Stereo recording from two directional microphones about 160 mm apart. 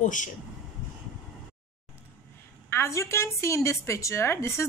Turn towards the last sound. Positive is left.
turn(degrees=15)  # may be behind; listen again after turning